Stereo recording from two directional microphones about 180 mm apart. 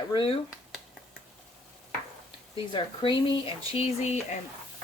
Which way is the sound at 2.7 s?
25° left (ahead or behind).